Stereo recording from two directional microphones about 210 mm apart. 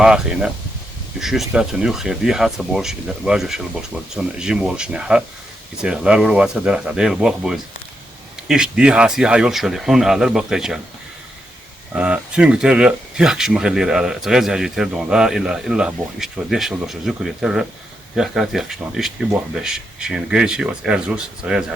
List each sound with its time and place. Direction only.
0.0 s speech: 5° right (ahead or behind)
11.9 s speech: 5° right (ahead or behind)